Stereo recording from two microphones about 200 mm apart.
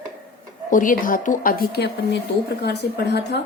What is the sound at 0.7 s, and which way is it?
A woman's voice, 40° left (ahead or behind).